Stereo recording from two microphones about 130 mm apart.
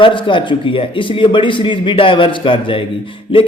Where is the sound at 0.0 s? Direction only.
40° left (ahead or behind).